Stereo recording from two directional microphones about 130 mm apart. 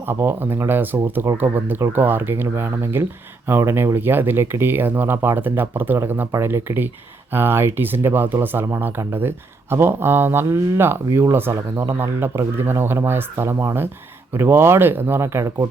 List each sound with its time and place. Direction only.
0.1 s speech: 15° right (ahead or behind)